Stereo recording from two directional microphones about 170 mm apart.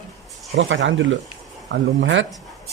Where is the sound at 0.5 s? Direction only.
90° right.